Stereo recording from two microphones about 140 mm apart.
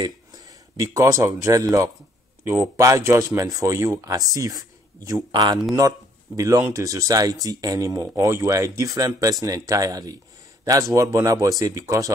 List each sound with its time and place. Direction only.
0.0 s speech: 25° right (ahead or behind)